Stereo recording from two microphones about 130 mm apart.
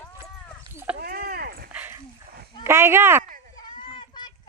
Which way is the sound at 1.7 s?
15° right (ahead or behind).